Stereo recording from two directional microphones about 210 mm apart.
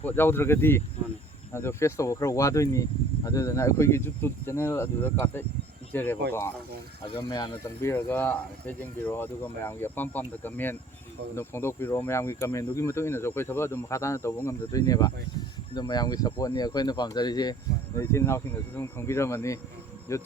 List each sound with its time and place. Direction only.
0.0 s speech: 10° left (ahead or behind)
7.0 s speech: 25° left (ahead or behind)